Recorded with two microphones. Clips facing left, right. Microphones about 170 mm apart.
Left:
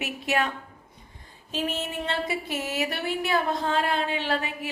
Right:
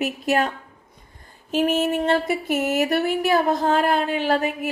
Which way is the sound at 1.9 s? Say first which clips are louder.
Right 9 dB; 50° right (ahead or behind).